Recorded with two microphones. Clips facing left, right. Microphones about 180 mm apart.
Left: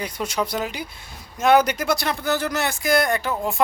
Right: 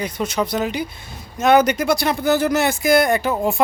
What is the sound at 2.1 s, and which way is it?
Speech, 10° right (ahead or behind).